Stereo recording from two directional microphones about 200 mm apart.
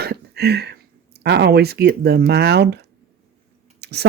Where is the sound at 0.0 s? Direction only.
55° right (ahead or behind).